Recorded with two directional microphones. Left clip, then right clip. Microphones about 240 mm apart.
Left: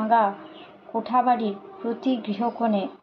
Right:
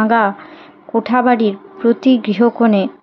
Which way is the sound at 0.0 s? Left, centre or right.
Right.